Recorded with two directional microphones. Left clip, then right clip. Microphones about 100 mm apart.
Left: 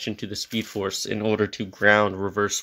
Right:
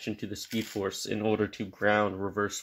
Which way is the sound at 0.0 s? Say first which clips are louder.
Left 5 dB; 55° left (ahead or behind).